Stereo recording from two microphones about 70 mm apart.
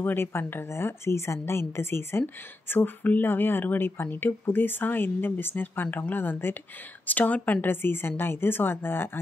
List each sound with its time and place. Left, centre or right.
0.0 s a woman's voice: left
7.6 s a woman's voice: left